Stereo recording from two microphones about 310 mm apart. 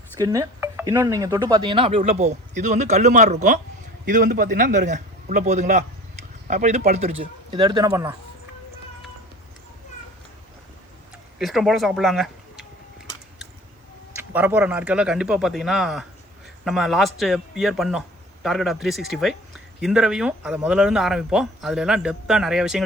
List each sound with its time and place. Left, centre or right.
0.2 s speech: centre
11.3 s speech: centre
14.2 s speech: centre